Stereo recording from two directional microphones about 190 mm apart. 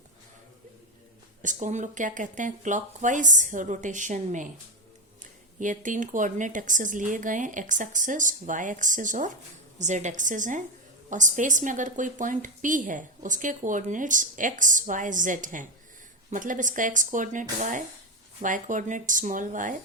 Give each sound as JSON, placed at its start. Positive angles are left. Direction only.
{"t": 1.4, "sound": "speech", "side_deg": -40}
{"t": 5.5, "sound": "a woman's voice", "side_deg": -40}